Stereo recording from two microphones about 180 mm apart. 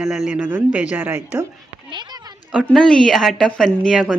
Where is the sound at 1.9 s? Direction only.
25° right (ahead or behind).